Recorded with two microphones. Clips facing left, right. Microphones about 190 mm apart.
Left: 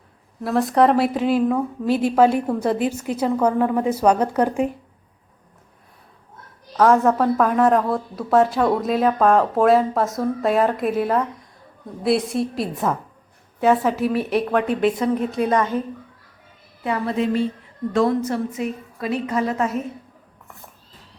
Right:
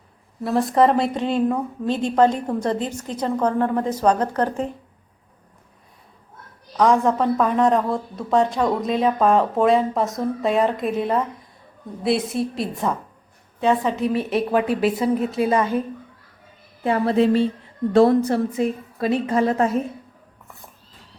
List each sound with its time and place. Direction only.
0.4 s a woman's voice: centre (ahead or behind)
6.7 s a woman's voice: 5° left (ahead or behind)
16.8 s a woman's voice: 30° right (ahead or behind)